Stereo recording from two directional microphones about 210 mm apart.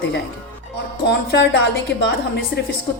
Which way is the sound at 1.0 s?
55° left (ahead or behind).